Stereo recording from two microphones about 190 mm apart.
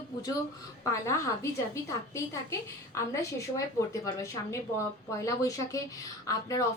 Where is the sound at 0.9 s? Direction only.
15° left (ahead or behind).